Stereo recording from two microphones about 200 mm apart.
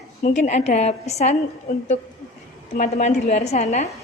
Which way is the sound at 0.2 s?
35° left (ahead or behind).